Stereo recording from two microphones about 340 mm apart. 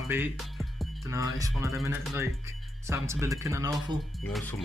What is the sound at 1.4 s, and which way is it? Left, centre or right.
Speech, centre.